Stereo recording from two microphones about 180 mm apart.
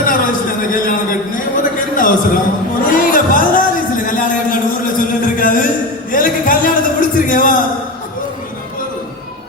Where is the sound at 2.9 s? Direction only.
50° left (ahead or behind).